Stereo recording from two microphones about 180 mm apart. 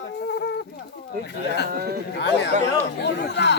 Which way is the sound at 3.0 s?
70° left (ahead or behind).